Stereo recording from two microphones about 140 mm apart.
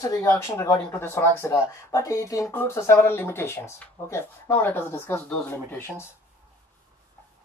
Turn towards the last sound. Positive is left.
turn(degrees=15)  # may be behind; listen again after turning